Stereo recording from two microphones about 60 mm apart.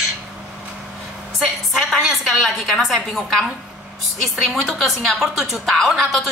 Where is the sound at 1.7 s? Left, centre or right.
Centre.